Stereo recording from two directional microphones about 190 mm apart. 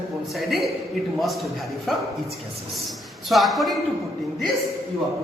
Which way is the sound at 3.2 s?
Centre (ahead or behind).